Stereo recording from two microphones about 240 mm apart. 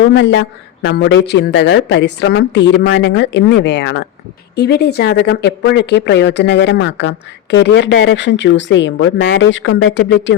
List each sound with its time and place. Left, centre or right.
0.0 s a woman's voice: left